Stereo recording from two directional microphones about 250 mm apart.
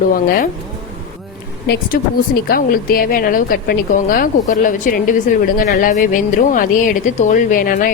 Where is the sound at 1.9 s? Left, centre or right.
Left.